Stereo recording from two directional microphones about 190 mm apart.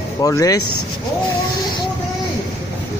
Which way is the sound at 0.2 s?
20° left (ahead or behind).